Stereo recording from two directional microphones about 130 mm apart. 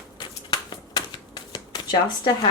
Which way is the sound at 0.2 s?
35° left (ahead or behind).